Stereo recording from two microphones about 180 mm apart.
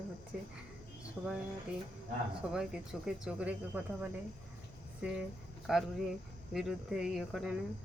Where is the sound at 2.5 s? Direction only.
5° right (ahead or behind).